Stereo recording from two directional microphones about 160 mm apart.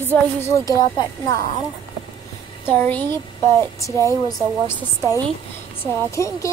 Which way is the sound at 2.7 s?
10° left (ahead or behind).